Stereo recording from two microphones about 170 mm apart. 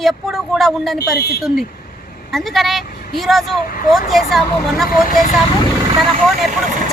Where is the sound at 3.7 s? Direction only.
55° left (ahead or behind).